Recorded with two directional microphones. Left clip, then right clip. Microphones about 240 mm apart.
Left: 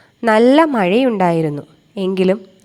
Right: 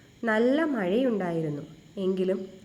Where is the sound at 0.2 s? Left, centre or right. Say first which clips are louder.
Left 13 dB; left.